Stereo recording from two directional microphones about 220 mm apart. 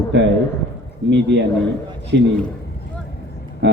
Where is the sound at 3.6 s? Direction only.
55° right (ahead or behind).